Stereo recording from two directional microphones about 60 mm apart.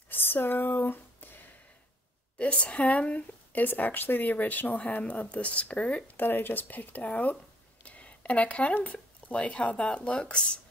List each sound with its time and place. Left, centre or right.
0.1 s a sound: left
2.3 s a woman's voice: left
3.6 s speech: left
6.1 s speech: left; by 10.6 s centre